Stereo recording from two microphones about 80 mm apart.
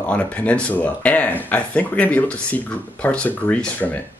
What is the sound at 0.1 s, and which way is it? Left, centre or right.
Speech, centre.